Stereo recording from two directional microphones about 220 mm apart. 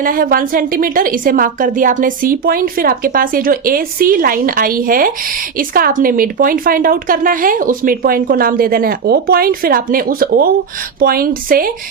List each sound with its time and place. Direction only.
0.0 s a woman's voice: 40° right (ahead or behind)